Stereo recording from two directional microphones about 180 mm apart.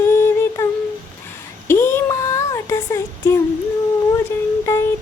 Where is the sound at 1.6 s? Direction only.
15° left (ahead or behind).